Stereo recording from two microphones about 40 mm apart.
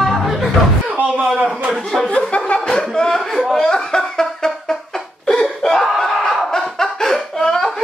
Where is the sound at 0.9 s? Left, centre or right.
Right.